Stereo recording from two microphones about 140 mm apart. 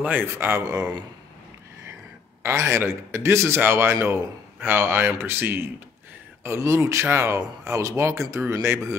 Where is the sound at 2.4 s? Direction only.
20° right (ahead or behind).